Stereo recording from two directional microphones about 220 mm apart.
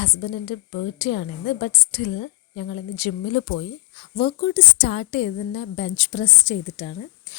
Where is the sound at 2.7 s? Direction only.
35° left (ahead or behind).